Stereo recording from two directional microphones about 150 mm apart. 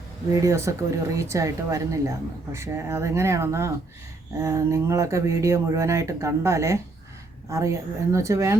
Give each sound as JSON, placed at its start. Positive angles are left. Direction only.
{"t": 0.3, "sound": "speech", "side_deg": -20}